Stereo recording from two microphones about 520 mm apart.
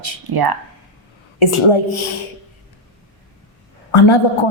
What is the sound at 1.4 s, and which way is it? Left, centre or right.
Speech, left.